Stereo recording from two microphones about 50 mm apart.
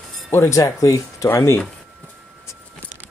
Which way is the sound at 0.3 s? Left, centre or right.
Left.